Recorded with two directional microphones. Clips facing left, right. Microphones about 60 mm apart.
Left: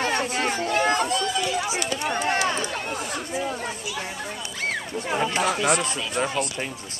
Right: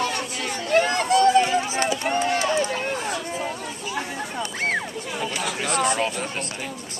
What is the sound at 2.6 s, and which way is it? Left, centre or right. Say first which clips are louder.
Run: right 3 dB; right.